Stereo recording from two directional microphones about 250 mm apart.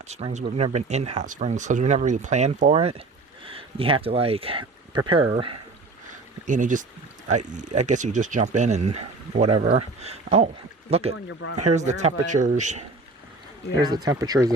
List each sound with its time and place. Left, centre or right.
0.1 s speech: right
6.4 s speech: right
11.3 s speech: left
11.5 s speech: right
13.8 s speech: centre